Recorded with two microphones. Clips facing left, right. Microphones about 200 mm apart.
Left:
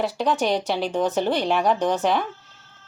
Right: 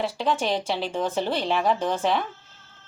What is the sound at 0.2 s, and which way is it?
Speech, centre (ahead or behind).